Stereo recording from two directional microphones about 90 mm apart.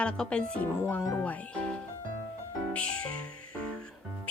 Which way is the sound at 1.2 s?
15° left (ahead or behind).